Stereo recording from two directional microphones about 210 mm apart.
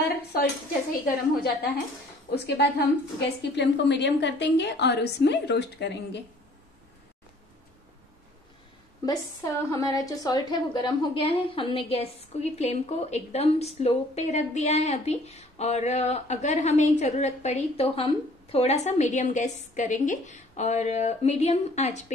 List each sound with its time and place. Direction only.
1.0 s a woman's voice: 45° left (ahead or behind)
9.0 s a woman's voice: 15° left (ahead or behind); by 22.0 s 30° left (ahead or behind)